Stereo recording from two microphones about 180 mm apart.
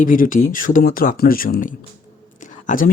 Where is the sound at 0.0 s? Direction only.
50° left (ahead or behind).